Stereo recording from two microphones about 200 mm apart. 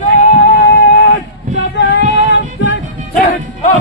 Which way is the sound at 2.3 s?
65° left (ahead or behind).